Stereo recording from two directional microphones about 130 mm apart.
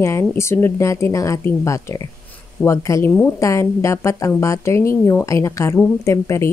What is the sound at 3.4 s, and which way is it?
A woman's voice, 25° left (ahead or behind).